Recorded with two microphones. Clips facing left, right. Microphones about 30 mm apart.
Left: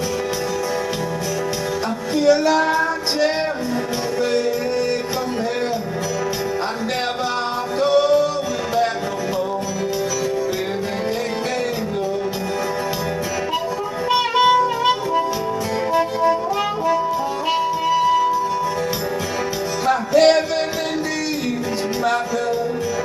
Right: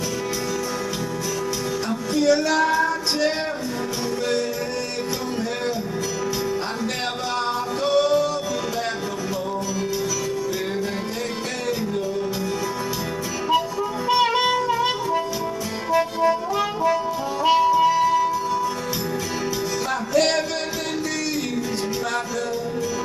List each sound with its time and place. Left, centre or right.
2.1 s music: centre
7.8 s music: centre
14.3 s music: centre
16.0 s music: centre
20.1 s music: centre